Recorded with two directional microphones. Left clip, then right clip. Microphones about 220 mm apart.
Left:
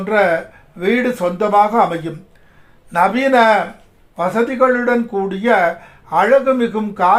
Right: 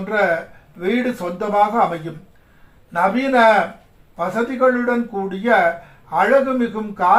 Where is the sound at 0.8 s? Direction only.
45° left (ahead or behind).